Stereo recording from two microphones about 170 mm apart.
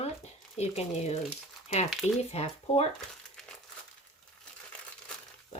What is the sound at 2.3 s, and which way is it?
Speech, 40° left (ahead or behind).